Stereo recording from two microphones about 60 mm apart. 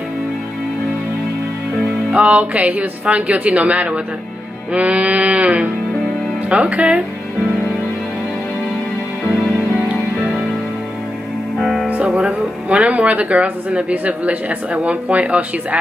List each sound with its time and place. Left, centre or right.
2.1 s speech: right
11.6 s music: centre
12.1 s speech: right